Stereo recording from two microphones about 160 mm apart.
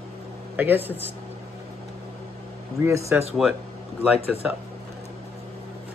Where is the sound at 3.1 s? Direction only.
10° right (ahead or behind).